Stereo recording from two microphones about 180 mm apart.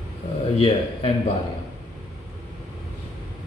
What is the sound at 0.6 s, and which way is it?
Speech, 30° left (ahead or behind).